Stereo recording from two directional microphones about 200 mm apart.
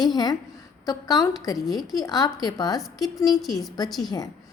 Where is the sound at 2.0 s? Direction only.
20° left (ahead or behind).